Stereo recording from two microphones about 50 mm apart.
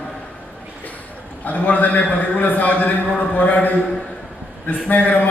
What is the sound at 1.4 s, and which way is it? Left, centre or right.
A man's voice, left.